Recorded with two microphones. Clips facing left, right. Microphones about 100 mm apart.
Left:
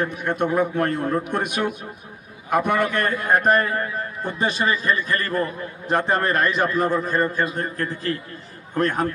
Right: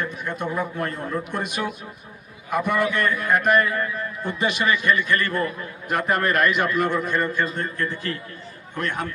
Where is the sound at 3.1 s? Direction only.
40° left (ahead or behind).